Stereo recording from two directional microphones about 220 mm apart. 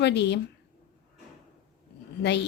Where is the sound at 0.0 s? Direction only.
50° left (ahead or behind).